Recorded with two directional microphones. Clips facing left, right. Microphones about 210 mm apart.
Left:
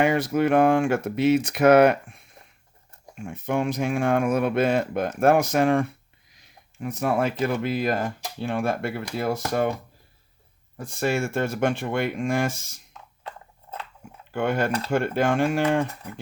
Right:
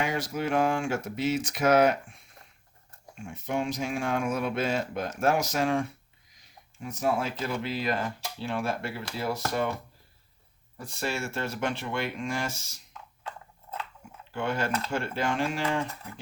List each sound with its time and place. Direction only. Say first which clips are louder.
0.0 s speech: left 9 dB; 60° left (ahead or behind)
10.8 s speech: left 8 dB; 50° left (ahead or behind)
14.3 s speech: left 5 dB; 55° left (ahead or behind)